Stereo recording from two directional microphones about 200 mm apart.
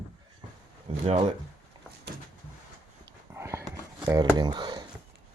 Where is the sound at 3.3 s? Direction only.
15° right (ahead or behind).